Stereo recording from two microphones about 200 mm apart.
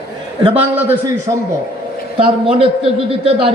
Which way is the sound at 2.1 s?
30° right (ahead or behind).